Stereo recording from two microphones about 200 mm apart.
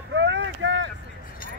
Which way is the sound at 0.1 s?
65° right (ahead or behind).